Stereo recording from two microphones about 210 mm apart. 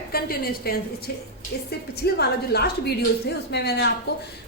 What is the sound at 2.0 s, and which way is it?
A woman's voice, 50° left (ahead or behind).